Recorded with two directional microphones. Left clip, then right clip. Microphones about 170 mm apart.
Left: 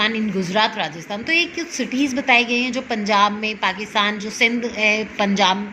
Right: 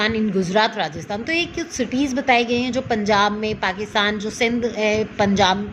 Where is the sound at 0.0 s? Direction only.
40° right (ahead or behind).